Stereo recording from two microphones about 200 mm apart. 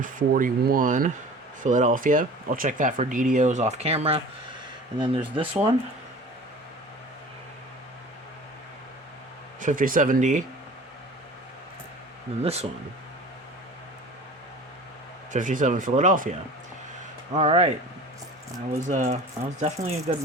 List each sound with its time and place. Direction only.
0.0 s speech: 40° right (ahead or behind); by 5.2 s 25° right (ahead or behind)
9.6 s speech: 40° right (ahead or behind)
12.4 s speech: 30° right (ahead or behind)
15.3 s speech: 40° right (ahead or behind)
17.3 s speech: 35° right (ahead or behind)
18.9 s speech: 40° right (ahead or behind)